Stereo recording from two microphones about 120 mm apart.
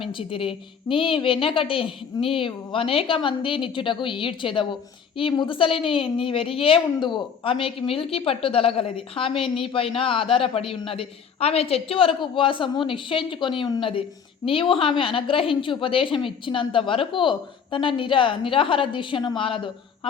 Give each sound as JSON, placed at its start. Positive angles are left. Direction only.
{"t": 0.0, "sound": "a woman's voice", "side_deg": 45}